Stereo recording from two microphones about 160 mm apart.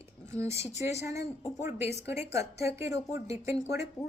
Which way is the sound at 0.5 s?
40° left (ahead or behind).